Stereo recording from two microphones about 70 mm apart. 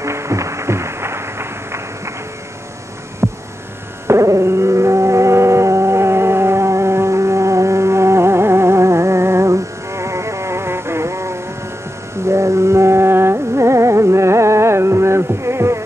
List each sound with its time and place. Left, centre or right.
0.0 s music: right
3.2 s hum: right
4.1 s dog: right
12.3 s carnatic music: right